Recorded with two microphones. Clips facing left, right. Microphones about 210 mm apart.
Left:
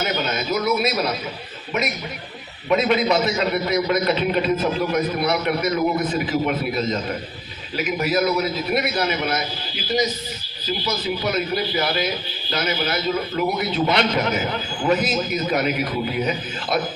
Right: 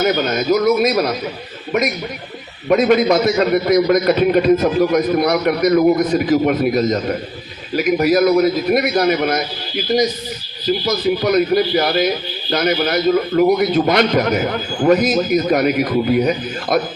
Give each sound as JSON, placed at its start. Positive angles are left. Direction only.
{"t": 0.0, "sound": "a man's voice", "side_deg": -45}
{"t": 2.6, "sound": "a man's voice", "side_deg": -45}
{"t": 10.8, "sound": "a man's voice", "side_deg": -45}